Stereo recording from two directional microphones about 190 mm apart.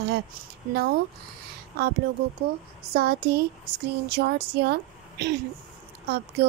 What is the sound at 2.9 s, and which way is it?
A woman's voice, 55° right (ahead or behind).